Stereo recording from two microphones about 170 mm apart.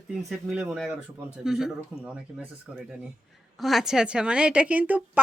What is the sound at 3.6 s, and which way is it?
A woman's voice, centre (ahead or behind).